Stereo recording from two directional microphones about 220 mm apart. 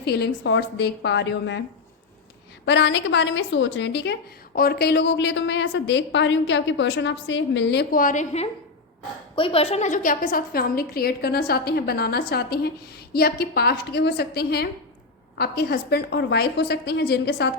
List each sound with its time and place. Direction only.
0.0 s a woman's voice: 50° left (ahead or behind)
2.6 s a woman's voice: 55° left (ahead or behind)